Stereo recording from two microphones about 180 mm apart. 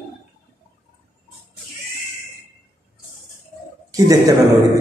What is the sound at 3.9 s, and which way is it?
Speech, 20° right (ahead or behind).